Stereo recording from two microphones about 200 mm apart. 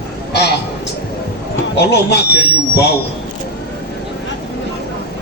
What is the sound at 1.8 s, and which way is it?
Speech, 55° left (ahead or behind).